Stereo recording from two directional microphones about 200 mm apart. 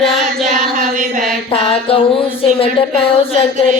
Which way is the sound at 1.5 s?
30° left (ahead or behind).